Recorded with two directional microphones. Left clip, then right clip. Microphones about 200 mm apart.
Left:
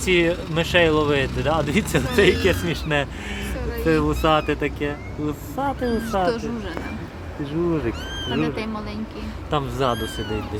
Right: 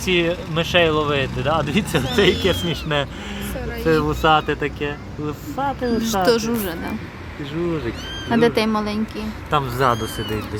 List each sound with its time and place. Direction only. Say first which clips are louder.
0.0 s speech: even; 5° left (ahead or behind)
6.2 s speech: right 6 dB; 40° right (ahead or behind)
8.3 s a woman's voice: right 9 dB; 40° right (ahead or behind)
9.5 s speech: right 4 dB; centre (ahead or behind)